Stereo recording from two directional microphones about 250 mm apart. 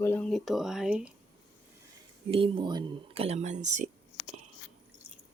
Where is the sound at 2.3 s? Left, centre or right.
Centre.